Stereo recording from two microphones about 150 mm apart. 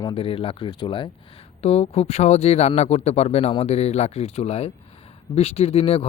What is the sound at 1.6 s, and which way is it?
Speech, 45° left (ahead or behind).